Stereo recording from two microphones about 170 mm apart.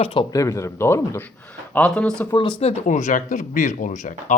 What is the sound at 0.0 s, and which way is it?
Speech, 30° left (ahead or behind).